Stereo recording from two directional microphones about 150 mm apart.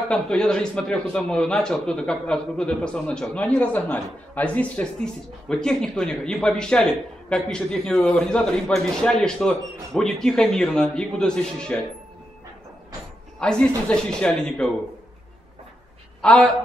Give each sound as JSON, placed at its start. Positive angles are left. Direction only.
{"t": 0.1, "sound": "a man's voice", "side_deg": 5}
{"t": 13.4, "sound": "a man's voice", "side_deg": 5}
{"t": 16.2, "sound": "a woman's voice", "side_deg": 5}